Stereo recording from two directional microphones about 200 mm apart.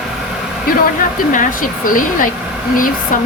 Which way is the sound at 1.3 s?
40° left (ahead or behind).